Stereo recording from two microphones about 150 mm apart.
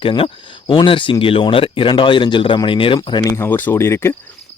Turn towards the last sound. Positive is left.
turn(degrees=15)  # may be behind; listen again after turning